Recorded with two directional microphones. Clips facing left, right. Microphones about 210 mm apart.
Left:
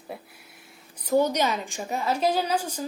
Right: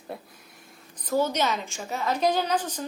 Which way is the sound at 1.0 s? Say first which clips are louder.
Left 3 dB; 15° left (ahead or behind).